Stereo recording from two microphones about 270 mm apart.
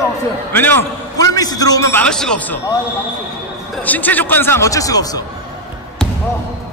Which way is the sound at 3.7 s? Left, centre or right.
Centre.